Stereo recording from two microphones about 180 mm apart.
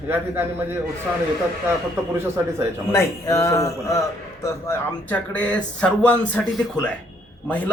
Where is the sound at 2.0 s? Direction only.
10° right (ahead or behind).